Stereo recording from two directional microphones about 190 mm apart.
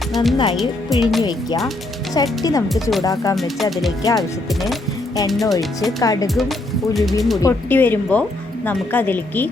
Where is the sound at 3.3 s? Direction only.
Centre (ahead or behind).